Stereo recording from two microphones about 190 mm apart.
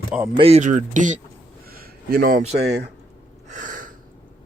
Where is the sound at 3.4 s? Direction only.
40° right (ahead or behind).